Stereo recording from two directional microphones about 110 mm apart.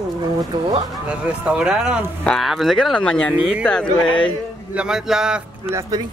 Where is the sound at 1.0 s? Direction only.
10° right (ahead or behind); by 4.3 s 10° left (ahead or behind).